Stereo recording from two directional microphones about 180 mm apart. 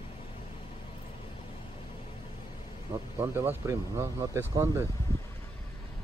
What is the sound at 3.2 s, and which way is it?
Speech, 10° right (ahead or behind).